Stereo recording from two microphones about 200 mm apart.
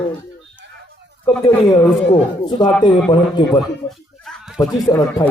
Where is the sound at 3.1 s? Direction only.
25° left (ahead or behind).